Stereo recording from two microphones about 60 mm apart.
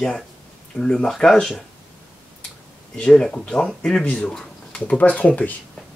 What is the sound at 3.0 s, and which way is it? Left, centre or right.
Speech, centre.